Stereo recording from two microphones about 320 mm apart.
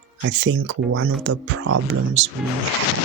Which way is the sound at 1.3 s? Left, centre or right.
Right.